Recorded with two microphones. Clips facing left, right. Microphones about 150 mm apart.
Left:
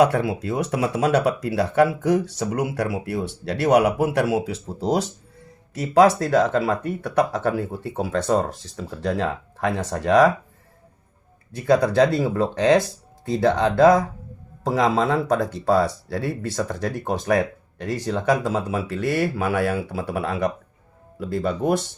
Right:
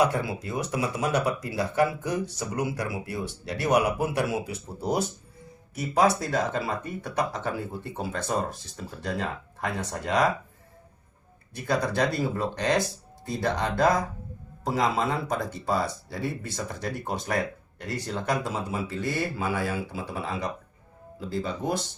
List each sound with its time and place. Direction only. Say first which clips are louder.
0.0 s speech: left 6 dB; 75° left (ahead or behind); by 10.2 s 90° left
11.9 s speech: left 8 dB; 90° left; by 21.8 s 65° left (ahead or behind)